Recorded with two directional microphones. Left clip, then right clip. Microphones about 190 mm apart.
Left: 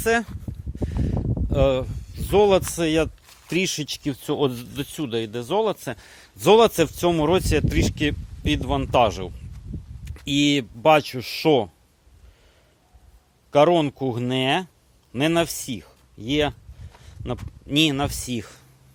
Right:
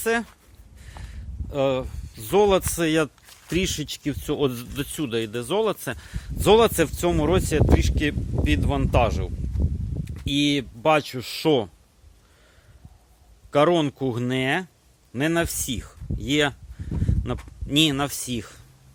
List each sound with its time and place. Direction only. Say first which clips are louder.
0.0 s speech: left 3 dB; 15° left (ahead or behind)
0.8 s a sound: left 16 dB; 10° left (ahead or behind)
2.3 s speech: left 2 dB; 5° left (ahead or behind)
13.5 s speech: left 2 dB; 5° left (ahead or behind)
15.5 s a sound: right 2 dB; centre (ahead or behind)
17.7 s speech: even; centre (ahead or behind)